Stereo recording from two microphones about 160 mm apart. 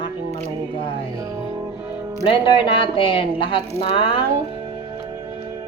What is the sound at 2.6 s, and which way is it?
A woman's voice, 30° left (ahead or behind).